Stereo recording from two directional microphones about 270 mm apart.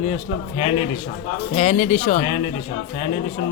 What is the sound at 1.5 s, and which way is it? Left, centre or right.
Speech, left.